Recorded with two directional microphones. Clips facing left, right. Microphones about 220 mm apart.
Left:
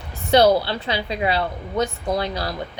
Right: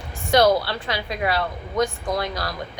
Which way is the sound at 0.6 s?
25° left (ahead or behind).